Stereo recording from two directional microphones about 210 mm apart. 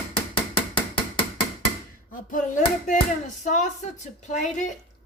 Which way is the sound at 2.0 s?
40° left (ahead or behind).